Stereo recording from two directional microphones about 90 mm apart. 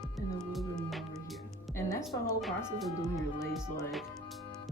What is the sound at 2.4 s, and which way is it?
Speech, centre (ahead or behind).